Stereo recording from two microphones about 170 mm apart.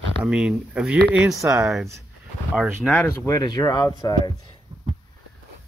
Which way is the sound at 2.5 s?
5° left (ahead or behind).